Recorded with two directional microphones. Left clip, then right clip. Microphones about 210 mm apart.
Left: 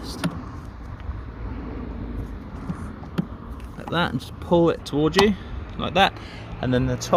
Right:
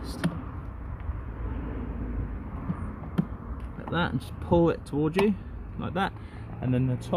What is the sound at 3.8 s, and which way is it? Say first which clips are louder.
Speech: left 5 dB; 15° left (ahead or behind).